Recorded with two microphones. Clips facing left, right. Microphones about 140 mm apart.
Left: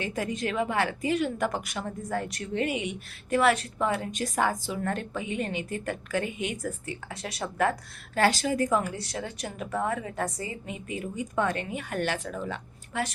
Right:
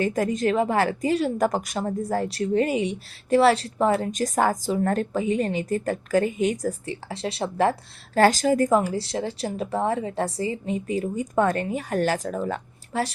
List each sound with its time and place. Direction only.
0.0 s a woman's voice: 45° right (ahead or behind)